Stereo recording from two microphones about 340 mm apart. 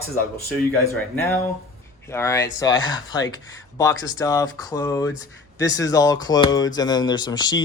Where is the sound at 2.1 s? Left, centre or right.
Centre.